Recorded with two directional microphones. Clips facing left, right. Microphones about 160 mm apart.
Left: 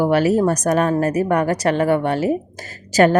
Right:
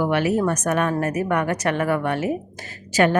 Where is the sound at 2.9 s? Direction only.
40° left (ahead or behind).